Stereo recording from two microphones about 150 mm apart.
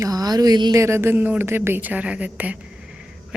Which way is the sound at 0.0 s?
25° right (ahead or behind).